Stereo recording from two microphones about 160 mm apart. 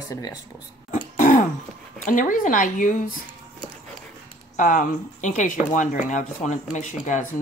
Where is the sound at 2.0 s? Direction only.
55° left (ahead or behind).